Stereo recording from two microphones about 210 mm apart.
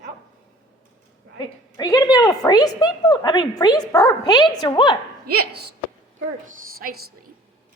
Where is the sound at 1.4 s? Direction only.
20° left (ahead or behind).